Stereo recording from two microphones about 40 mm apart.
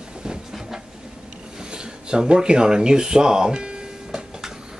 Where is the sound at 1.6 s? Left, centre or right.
Right.